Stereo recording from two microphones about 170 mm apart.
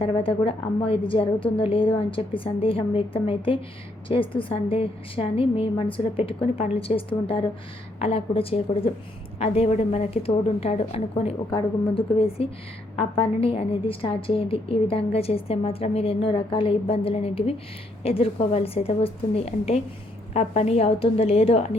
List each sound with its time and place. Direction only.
0.0 s a woman's voice: 35° left (ahead or behind)